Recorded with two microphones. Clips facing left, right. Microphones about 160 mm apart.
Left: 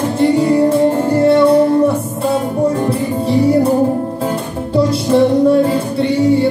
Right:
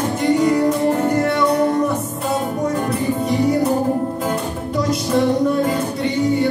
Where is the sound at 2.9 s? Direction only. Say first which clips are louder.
Left 4 dB; 30° left (ahead or behind).